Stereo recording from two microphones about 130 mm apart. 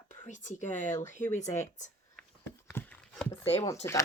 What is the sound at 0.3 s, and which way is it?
Speech, 70° left (ahead or behind).